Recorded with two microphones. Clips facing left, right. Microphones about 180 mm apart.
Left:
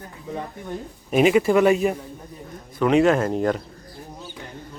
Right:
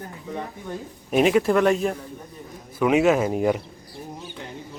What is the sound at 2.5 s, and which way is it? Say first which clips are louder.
Speech: left 1 dB; 5° right (ahead or behind).